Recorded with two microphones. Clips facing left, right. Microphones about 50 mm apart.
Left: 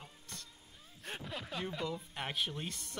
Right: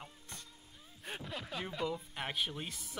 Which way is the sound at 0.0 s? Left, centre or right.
Centre.